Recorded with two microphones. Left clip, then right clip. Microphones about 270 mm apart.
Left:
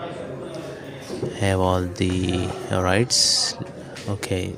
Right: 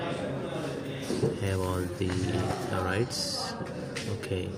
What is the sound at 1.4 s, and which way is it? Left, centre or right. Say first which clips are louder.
Speech: left 10 dB; left.